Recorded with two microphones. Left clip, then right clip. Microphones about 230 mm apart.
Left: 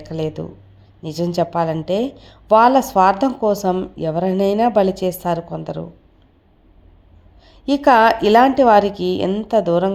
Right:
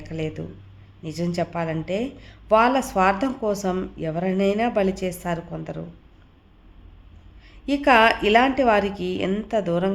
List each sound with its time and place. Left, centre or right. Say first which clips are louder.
0.0 s a woman's voice: left 6 dB; centre
7.4 s a sound: left 6 dB; left
7.9 s a woman's voice: left 4 dB; left